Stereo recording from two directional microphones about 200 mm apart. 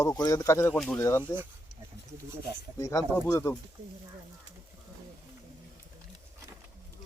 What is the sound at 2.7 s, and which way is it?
Speech, 15° left (ahead or behind).